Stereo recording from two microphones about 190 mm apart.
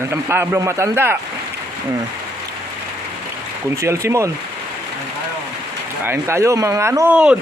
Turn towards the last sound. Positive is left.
turn(degrees=-5)  # may be behind; listen again after turning